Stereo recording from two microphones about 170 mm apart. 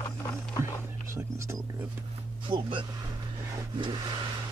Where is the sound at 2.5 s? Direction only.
30° right (ahead or behind).